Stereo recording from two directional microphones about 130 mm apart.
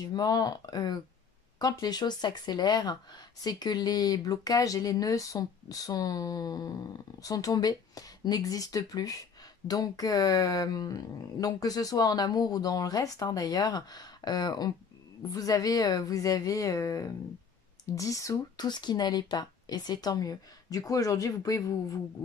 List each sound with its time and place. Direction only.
0.0 s speech: 30° left (ahead or behind)